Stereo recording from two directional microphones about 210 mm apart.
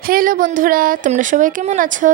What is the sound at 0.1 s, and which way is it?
Speech, 40° right (ahead or behind).